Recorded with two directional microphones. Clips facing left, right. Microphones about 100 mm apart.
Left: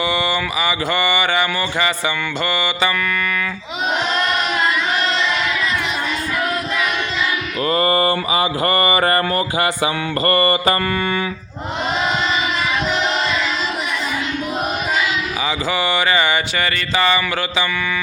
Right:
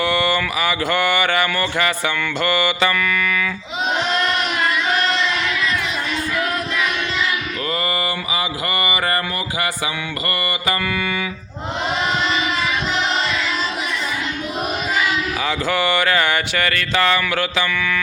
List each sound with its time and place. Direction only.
0.0 s mantra: centre (ahead or behind)
7.7 s mantra: 35° left (ahead or behind)
15.4 s mantra: 5° left (ahead or behind)